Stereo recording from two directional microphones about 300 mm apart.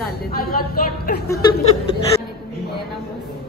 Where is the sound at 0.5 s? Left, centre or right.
Left.